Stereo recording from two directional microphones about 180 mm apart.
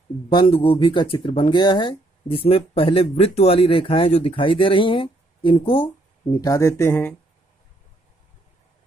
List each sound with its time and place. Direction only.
0.3 s speech: 30° left (ahead or behind)
6.4 s speech: 15° left (ahead or behind)